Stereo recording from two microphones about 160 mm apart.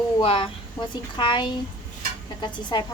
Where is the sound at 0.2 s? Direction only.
35° left (ahead or behind).